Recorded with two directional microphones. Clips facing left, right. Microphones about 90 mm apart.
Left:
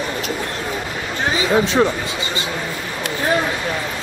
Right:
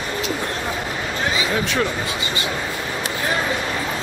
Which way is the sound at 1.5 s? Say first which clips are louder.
Left 10 dB; 30° left (ahead or behind).